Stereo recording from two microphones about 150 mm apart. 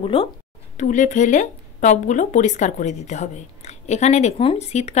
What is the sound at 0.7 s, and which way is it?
Speech, 55° left (ahead or behind).